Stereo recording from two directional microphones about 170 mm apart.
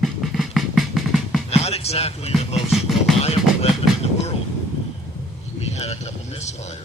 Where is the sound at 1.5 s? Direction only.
35° left (ahead or behind).